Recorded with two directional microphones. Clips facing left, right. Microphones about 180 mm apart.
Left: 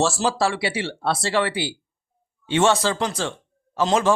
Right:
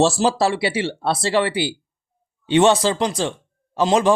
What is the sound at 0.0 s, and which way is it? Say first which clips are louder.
Speech: right 4 dB; 20° right (ahead or behind).